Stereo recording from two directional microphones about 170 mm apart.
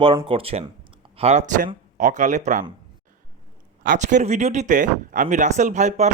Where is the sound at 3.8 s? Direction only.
50° right (ahead or behind).